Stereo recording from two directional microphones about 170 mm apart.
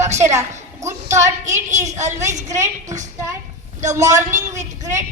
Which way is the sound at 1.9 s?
45° right (ahead or behind).